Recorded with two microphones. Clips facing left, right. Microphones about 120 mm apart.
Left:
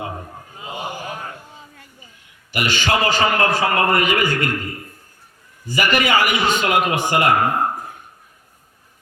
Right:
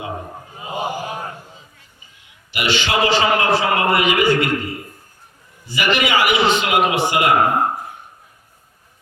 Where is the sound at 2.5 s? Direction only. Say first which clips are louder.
Even; 45° left (ahead or behind).